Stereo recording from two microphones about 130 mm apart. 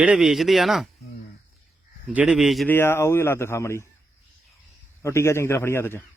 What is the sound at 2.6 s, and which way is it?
Speech, 15° left (ahead or behind).